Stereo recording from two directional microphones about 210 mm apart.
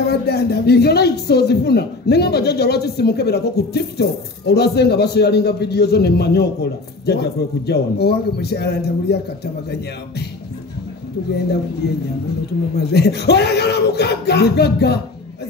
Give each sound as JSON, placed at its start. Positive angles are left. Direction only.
{"t": 0.1, "sound": "speech", "side_deg": 50}
{"t": 11.8, "sound": "speech", "side_deg": 50}